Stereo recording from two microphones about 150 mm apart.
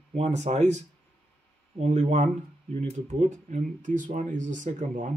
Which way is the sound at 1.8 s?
50° right (ahead or behind).